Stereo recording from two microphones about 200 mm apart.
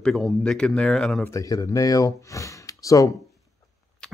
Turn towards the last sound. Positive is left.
turn(degrees=15)  # may be behind; listen again after turning